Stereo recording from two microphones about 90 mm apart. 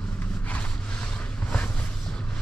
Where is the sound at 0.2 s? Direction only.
15° left (ahead or behind).